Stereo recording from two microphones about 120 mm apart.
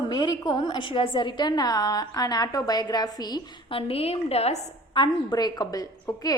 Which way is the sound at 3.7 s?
50° left (ahead or behind).